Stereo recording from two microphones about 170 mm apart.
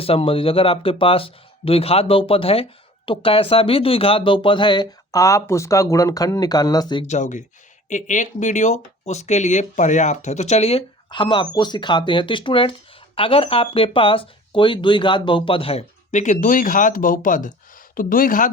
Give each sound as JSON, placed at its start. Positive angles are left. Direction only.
{"t": 0.0, "sound": "speech", "side_deg": 35}
{"t": 7.1, "sound": "speech", "side_deg": 45}